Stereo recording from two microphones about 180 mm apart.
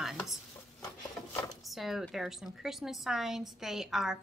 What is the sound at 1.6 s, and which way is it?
A woman's voice, centre (ahead or behind).